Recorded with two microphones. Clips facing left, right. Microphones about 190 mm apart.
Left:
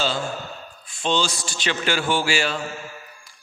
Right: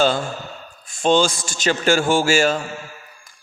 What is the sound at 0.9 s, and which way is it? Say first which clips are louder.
A man's voice: right 7 dB; 45° right (ahead or behind).